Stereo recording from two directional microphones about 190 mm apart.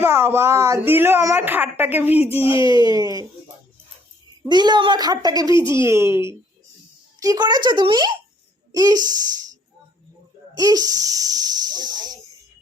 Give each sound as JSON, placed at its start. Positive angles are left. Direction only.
{"t": 0.0, "sound": "speech", "side_deg": -10}
{"t": 2.4, "sound": "a child's voice", "side_deg": 30}
{"t": 2.6, "sound": "a woman's voice", "side_deg": -20}
{"t": 4.4, "sound": "a woman's voice", "side_deg": -20}